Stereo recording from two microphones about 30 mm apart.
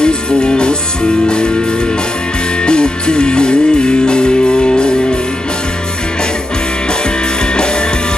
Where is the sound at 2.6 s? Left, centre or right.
Left.